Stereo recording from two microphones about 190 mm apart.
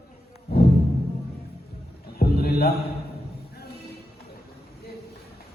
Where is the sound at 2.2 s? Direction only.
55° left (ahead or behind).